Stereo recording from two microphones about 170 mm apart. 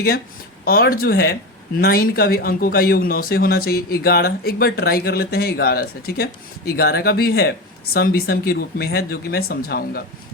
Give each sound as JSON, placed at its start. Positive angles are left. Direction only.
{"t": 0.6, "sound": "speech", "side_deg": 60}